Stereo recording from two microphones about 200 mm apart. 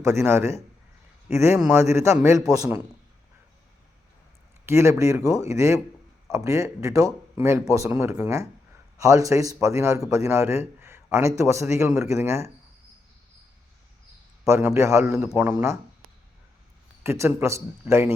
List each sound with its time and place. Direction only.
0.0 s a man's voice: 15° right (ahead or behind)
4.6 s a man's voice: 15° right (ahead or behind)
14.4 s a man's voice: 15° right (ahead or behind)
17.0 s a man's voice: 10° right (ahead or behind)